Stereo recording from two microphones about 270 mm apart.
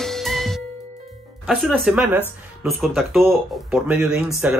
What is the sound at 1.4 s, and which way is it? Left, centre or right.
Speech, centre.